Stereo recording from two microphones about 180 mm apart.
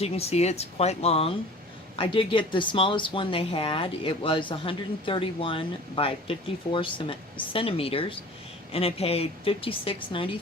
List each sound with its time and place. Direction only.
0.0 s speech: 35° left (ahead or behind)